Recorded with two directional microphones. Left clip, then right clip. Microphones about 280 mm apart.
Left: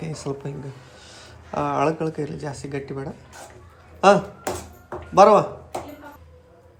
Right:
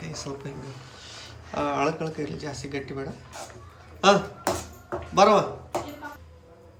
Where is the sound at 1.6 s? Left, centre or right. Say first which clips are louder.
Left 4 dB; centre.